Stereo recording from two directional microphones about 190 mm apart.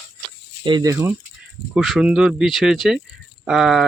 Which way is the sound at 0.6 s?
20° right (ahead or behind).